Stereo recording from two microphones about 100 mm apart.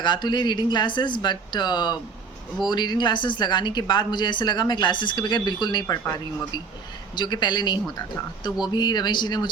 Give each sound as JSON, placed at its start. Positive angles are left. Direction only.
{"t": 0.0, "sound": "a woman's voice", "side_deg": 50}
{"t": 7.2, "sound": "a woman's voice", "side_deg": 45}